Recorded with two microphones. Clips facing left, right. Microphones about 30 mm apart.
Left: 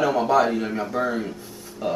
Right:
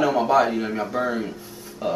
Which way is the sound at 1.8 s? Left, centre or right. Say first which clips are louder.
Right 1 dB; centre.